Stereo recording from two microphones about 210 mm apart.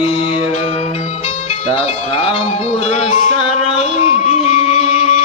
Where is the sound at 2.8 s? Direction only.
30° left (ahead or behind).